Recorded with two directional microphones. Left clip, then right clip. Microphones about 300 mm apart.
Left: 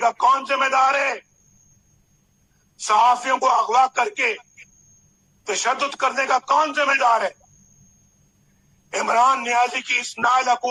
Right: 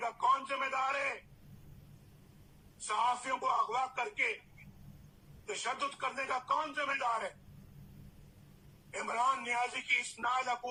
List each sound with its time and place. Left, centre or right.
0.0 s speech: left
2.8 s speech: left
5.5 s speech: left
8.9 s speech: left